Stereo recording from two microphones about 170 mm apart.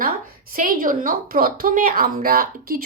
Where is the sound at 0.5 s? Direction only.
55° right (ahead or behind).